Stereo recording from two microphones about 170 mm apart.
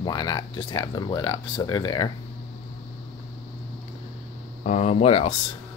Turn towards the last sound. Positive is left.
turn(degrees=35)  # may be behind; listen again after turning